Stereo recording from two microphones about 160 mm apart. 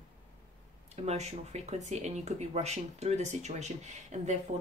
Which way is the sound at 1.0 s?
45° right (ahead or behind).